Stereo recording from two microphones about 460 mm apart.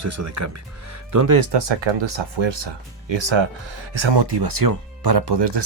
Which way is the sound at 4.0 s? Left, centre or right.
Right.